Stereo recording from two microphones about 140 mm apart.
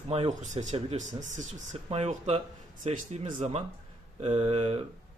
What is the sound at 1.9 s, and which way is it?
Speech, 50° right (ahead or behind).